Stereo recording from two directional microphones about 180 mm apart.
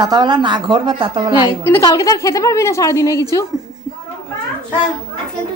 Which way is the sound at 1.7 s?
15° left (ahead or behind).